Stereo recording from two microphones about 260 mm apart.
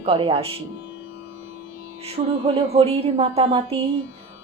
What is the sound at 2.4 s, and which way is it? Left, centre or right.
Music, right.